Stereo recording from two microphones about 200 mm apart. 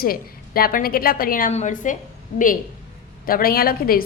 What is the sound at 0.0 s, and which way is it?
A woman's voice, 50° left (ahead or behind).